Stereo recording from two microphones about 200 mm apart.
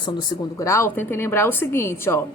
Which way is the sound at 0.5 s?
15° left (ahead or behind).